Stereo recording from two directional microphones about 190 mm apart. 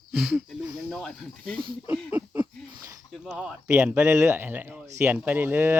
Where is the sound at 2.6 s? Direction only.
20° right (ahead or behind).